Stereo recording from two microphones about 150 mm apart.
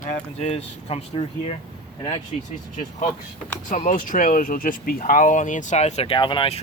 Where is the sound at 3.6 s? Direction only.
60° left (ahead or behind).